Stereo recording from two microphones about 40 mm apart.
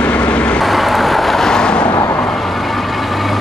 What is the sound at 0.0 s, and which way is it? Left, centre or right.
Vehicle, left.